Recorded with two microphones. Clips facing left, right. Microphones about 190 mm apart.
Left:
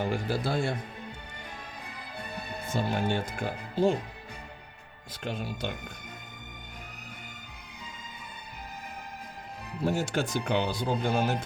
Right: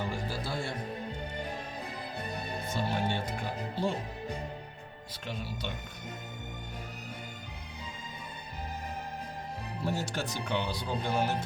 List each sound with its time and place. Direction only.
0.0 s speech: 55° left (ahead or behind)
2.8 s speech: 50° left (ahead or behind)
5.2 s speech: 50° left (ahead or behind)
9.8 s speech: 50° left (ahead or behind)